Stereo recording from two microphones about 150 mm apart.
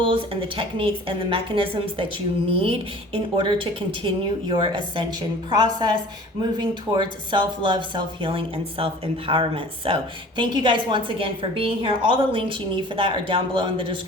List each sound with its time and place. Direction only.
0.0 s a woman's voice: 35° right (ahead or behind)